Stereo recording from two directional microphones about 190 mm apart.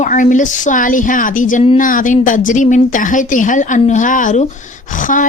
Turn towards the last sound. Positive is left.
turn(degrees=45)  # may be behind; listen again after turning